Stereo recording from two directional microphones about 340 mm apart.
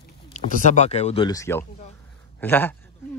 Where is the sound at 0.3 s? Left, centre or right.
Left.